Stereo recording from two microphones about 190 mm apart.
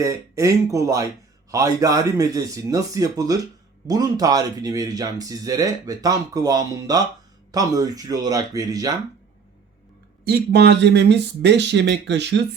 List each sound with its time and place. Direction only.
0.0 s speech: 15° right (ahead or behind)
10.2 s speech: 60° right (ahead or behind)